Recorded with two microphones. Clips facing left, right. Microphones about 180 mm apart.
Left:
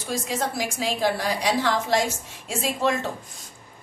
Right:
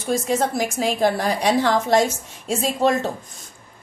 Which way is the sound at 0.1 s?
50° right (ahead or behind).